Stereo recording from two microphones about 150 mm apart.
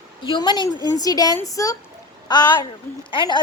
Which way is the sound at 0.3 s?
30° left (ahead or behind).